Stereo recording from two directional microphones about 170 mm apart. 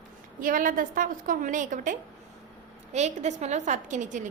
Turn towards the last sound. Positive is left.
turn(degrees=-45)  # may be behind; listen again after turning